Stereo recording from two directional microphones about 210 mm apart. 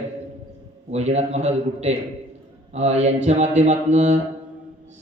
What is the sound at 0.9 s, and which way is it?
A man's voice, 30° right (ahead or behind).